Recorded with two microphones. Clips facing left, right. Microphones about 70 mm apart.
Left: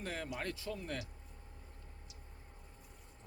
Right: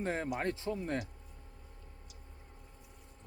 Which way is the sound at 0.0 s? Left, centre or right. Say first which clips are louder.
Right 7 dB; right.